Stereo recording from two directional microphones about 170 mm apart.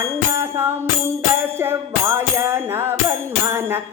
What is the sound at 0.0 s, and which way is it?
Music, 15° right (ahead or behind).